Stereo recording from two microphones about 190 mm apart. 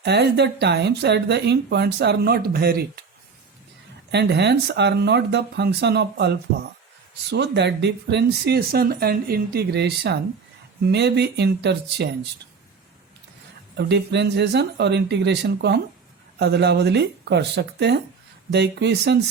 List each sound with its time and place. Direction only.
0.0 s speech: 60° right (ahead or behind)
4.1 s speech: 60° right (ahead or behind)
13.7 s speech: 65° right (ahead or behind)